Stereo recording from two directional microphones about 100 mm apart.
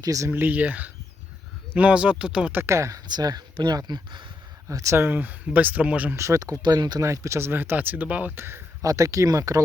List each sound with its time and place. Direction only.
0.0 s speech: 35° right (ahead or behind)
0.3 s speech: 20° right (ahead or behind)
2.6 s speech: 30° right (ahead or behind)
3.1 s speech: 45° right (ahead or behind)
4.7 s speech: 30° right (ahead or behind); by 6.1 s 15° right (ahead or behind)
6.1 s speech: 30° right (ahead or behind)
6.6 s speech: 45° right (ahead or behind)
7.0 s speech: 30° right (ahead or behind)